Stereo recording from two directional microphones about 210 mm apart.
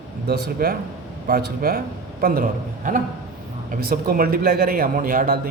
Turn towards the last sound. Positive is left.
turn(degrees=-40)  # may be behind; listen again after turning